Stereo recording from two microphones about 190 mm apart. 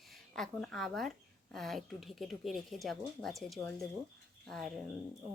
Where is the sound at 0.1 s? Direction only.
Centre (ahead or behind).